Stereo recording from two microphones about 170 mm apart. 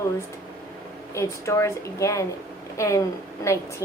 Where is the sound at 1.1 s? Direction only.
15° left (ahead or behind).